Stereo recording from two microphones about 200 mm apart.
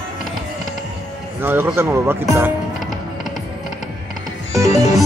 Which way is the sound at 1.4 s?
10° right (ahead or behind).